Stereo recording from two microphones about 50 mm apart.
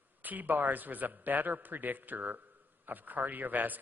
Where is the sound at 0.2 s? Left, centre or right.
Right.